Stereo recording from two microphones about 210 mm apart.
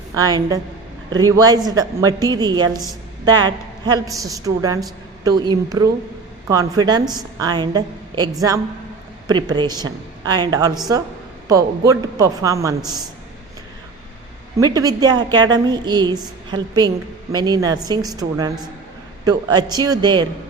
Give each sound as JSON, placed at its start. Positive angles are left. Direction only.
{"t": 0.2, "sound": "a woman's voice", "side_deg": -15}
{"t": 14.6, "sound": "a woman's voice", "side_deg": -20}